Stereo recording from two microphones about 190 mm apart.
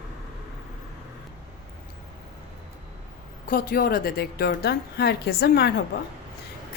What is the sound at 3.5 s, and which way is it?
A woman's voice, 50° left (ahead or behind).